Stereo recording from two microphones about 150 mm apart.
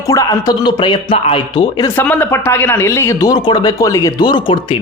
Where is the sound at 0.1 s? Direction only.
25° left (ahead or behind).